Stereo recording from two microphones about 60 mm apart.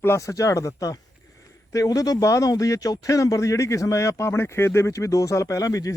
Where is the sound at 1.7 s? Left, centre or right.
Left.